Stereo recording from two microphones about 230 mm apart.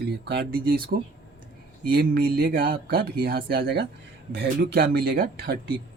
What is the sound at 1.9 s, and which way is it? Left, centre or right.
Speech, right.